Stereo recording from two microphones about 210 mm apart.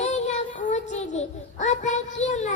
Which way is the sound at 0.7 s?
30° left (ahead or behind).